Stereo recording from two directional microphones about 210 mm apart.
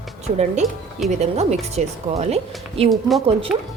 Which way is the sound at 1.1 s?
30° right (ahead or behind).